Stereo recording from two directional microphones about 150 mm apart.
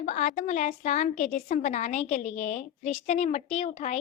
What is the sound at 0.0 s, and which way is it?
A woman's voice, 50° left (ahead or behind).